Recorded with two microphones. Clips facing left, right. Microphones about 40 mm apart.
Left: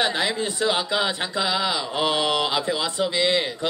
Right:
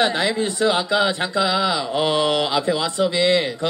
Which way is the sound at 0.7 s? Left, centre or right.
Centre.